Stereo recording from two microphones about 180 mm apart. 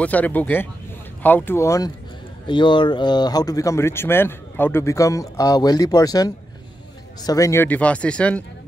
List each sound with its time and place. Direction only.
0.0 s speech: 10° left (ahead or behind)